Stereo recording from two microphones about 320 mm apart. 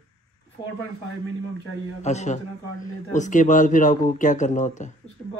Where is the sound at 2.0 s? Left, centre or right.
Left.